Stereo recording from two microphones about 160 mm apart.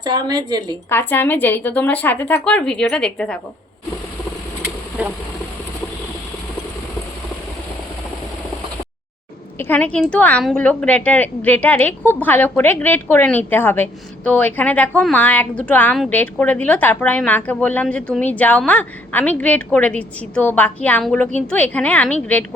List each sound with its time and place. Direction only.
0.0 s a woman's voice: 25° right (ahead or behind)
0.9 s a woman's voice: 15° left (ahead or behind)
9.6 s a woman's voice: 10° left (ahead or behind)